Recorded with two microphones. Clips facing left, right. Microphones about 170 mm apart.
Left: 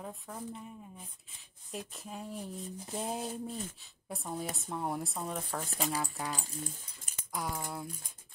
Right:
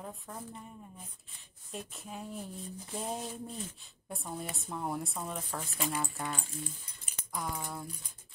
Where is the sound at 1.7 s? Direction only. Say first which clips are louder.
Left 1 dB; centre (ahead or behind).